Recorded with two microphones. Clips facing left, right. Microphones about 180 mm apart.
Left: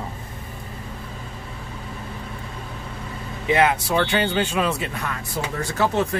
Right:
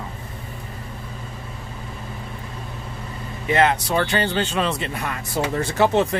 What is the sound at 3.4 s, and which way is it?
Speech, 10° left (ahead or behind).